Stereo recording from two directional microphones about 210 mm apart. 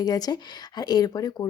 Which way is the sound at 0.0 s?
20° left (ahead or behind).